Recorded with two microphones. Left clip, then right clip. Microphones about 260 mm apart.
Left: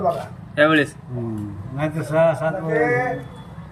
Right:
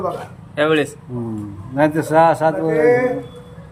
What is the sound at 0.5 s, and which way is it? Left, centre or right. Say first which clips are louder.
A man's voice: even; centre.